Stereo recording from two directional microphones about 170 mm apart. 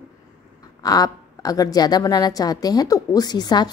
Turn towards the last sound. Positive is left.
turn(degrees=25)  # may be behind; listen again after turning